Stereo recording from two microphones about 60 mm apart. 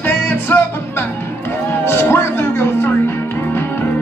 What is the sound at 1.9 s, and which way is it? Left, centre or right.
Music, left.